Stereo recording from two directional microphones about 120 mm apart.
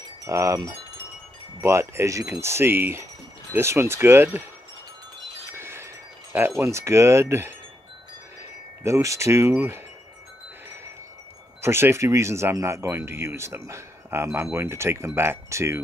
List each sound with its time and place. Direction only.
0.2 s speech: 25° right (ahead or behind)
5.5 s wind chime: 20° right (ahead or behind)
6.6 s speech: 25° right (ahead or behind)
8.8 s speech: 25° right (ahead or behind)
11.6 s speech: 20° right (ahead or behind)